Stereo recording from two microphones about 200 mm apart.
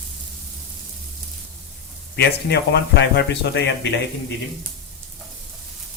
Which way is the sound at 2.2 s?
55° left (ahead or behind).